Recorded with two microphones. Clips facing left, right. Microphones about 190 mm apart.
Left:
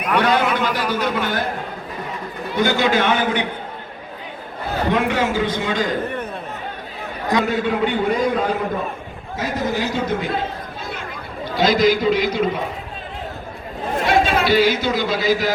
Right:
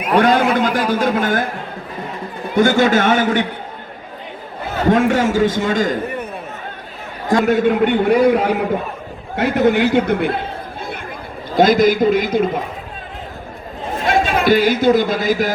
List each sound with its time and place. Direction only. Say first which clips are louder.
0.2 s a man's voice: right 5 dB; 45° right (ahead or behind)
2.6 s a man's voice: right 5 dB; 50° right (ahead or behind)
4.9 s a man's voice: right 6 dB; 45° right (ahead or behind)
7.3 s a man's voice: right 5 dB; 55° right (ahead or behind)
11.4 s a man's voice: right 4 dB; 50° right (ahead or behind)
14.1 s speech: right 3 dB; 50° right (ahead or behind)